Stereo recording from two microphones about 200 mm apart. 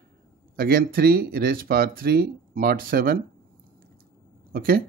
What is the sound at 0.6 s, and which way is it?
Speech, 50° right (ahead or behind).